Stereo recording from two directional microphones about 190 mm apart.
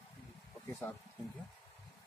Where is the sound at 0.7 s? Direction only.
15° left (ahead or behind).